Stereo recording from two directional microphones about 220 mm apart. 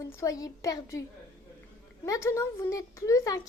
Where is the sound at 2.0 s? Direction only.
15° left (ahead or behind).